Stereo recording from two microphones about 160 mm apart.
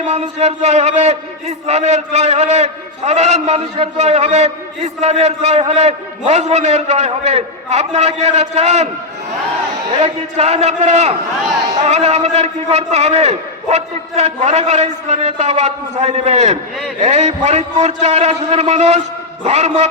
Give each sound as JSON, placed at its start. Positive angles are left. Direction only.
{"t": 0.1, "sound": "a man's voice", "side_deg": -40}
{"t": 10.0, "sound": "a man's voice", "side_deg": -40}